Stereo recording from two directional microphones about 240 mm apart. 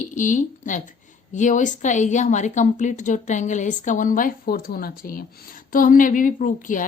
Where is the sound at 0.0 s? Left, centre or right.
Left.